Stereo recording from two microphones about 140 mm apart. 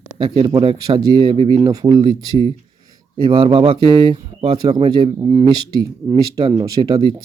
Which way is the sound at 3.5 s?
40° right (ahead or behind).